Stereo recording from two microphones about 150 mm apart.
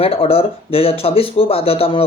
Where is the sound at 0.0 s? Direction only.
40° left (ahead or behind).